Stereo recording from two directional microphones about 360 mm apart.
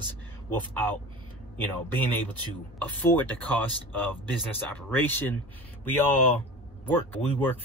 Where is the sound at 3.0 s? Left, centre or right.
Centre.